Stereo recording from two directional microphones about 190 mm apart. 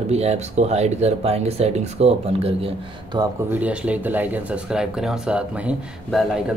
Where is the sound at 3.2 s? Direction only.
10° right (ahead or behind).